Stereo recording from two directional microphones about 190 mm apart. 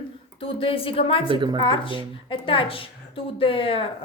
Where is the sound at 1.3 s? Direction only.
25° right (ahead or behind).